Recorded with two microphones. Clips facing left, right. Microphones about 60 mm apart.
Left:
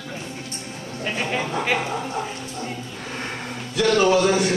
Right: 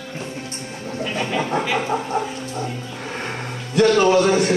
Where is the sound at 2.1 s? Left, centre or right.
Right.